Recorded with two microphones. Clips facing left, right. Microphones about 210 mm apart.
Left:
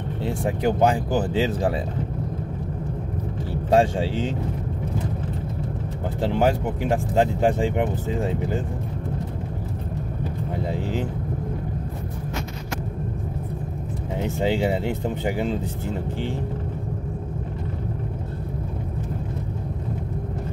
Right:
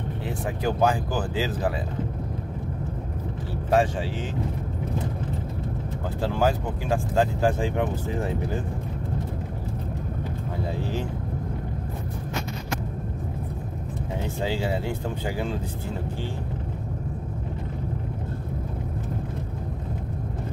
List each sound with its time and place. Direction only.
0.2 s speech: 20° left (ahead or behind)
3.7 s speech: 25° left (ahead or behind)
6.2 s speech: 20° left (ahead or behind)
14.2 s speech: 20° left (ahead or behind)